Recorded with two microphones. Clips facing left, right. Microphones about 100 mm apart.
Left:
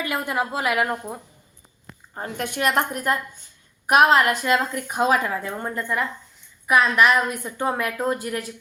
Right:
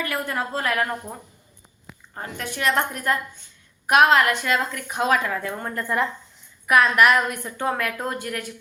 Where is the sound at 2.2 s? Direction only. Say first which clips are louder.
Left 3 dB; 45° left (ahead or behind).